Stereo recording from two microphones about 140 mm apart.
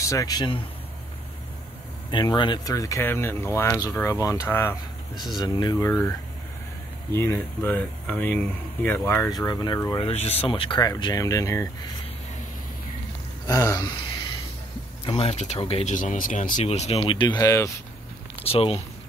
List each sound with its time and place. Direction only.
0.0 s speech: 25° left (ahead or behind)
2.0 s speech: 35° left (ahead or behind); by 4.7 s 20° left (ahead or behind)
5.2 s speech: 30° left (ahead or behind)
5.9 s speech: 15° left (ahead or behind)
9.4 s speech: 25° left (ahead or behind)
10.0 s speech: 45° left (ahead or behind); by 11.9 s 25° left (ahead or behind)
13.5 s a sound: 25° left (ahead or behind)
15.0 s speech: 45° left (ahead or behind)
15.9 s speech: 65° left (ahead or behind)
16.6 s speech: 50° left (ahead or behind)
17.4 s speech: 20° left (ahead or behind)
18.4 s speech: 45° left (ahead or behind)